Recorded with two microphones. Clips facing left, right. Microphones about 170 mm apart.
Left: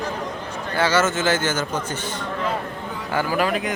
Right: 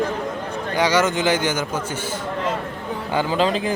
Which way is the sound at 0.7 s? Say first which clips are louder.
Right 1 dB; 15° right (ahead or behind).